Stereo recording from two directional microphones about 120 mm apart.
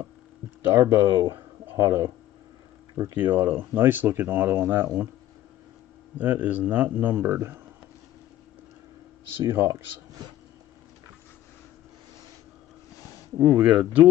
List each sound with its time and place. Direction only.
0.7 s speech: 25° right (ahead or behind)
3.2 s speech: 15° right (ahead or behind)
6.1 s speech: 15° right (ahead or behind)
9.4 s speech: 20° right (ahead or behind)
13.4 s speech: 20° right (ahead or behind)